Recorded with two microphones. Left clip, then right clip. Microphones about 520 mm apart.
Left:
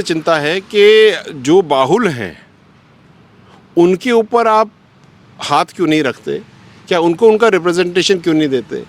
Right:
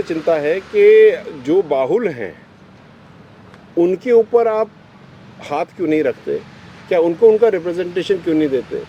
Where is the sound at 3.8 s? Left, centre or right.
Left.